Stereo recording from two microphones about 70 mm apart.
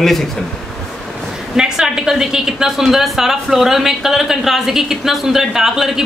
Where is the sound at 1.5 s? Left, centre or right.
Centre.